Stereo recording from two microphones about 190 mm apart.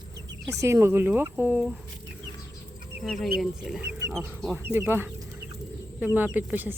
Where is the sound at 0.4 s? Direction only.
15° right (ahead or behind).